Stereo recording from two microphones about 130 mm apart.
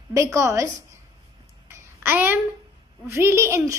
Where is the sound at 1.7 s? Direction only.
15° right (ahead or behind).